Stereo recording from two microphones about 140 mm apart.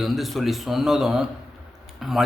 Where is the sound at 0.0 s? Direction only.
Centre (ahead or behind).